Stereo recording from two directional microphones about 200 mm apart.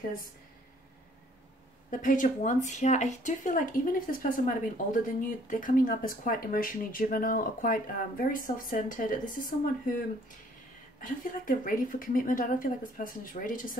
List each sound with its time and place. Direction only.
1.9 s speech: 40° left (ahead or behind)
11.0 s speech: 40° left (ahead or behind)